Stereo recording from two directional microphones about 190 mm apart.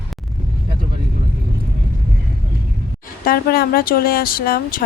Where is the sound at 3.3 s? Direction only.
50° left (ahead or behind).